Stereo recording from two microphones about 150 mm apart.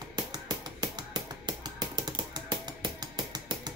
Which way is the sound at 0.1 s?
25° right (ahead or behind).